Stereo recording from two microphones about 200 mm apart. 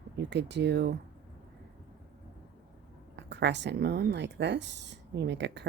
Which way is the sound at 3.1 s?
60° right (ahead or behind).